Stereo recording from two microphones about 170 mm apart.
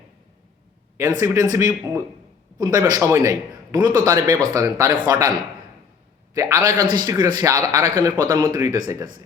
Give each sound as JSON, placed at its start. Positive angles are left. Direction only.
{"t": 1.2, "sound": "a man's voice", "side_deg": -15}
{"t": 6.3, "sound": "a man's voice", "side_deg": -15}